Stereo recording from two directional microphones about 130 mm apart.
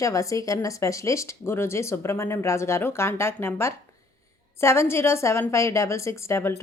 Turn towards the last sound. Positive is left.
turn(degrees=20)  # may be behind; listen again after turning